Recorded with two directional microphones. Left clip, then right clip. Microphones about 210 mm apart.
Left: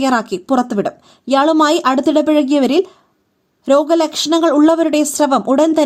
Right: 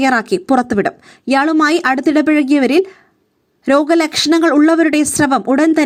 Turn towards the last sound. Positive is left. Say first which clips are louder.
# even
turn(degrees=-15)  # may be behind; listen again after turning